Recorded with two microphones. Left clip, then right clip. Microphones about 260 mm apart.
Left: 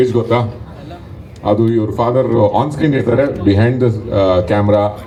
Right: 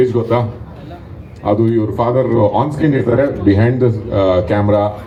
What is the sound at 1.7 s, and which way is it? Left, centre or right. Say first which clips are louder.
Speech: left 1 dB; left.